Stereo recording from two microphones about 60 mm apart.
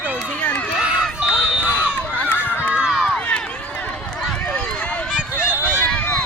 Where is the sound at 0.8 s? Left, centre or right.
Centre.